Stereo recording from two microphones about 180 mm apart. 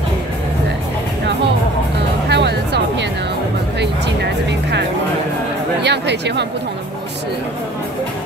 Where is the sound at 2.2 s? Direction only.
70° right (ahead or behind).